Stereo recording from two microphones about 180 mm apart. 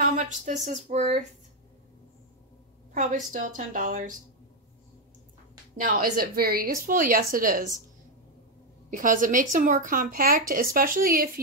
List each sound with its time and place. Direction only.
0.1 s speech: 45° right (ahead or behind)
2.9 s a woman's voice: 45° right (ahead or behind)
5.8 s a woman's voice: 50° right (ahead or behind)
8.9 s a woman's voice: 45° right (ahead or behind)